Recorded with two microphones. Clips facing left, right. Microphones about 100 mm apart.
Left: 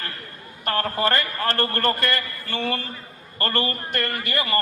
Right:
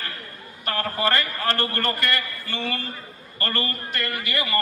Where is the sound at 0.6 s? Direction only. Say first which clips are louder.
Left 2 dB; 45° left (ahead or behind).